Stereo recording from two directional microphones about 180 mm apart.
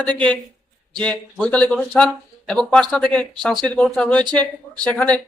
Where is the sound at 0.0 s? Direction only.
5° left (ahead or behind).